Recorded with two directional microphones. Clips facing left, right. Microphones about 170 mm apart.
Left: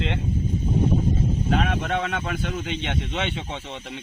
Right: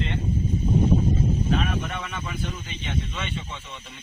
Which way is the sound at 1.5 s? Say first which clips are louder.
Left 3 dB; 80° left.